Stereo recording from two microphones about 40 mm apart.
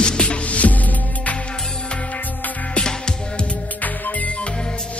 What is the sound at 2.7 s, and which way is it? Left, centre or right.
Music, centre.